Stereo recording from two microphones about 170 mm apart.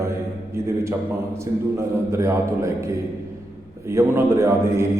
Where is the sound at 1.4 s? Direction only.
15° right (ahead or behind).